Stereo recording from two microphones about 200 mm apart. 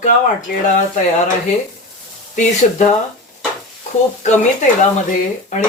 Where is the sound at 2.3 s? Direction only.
35° left (ahead or behind).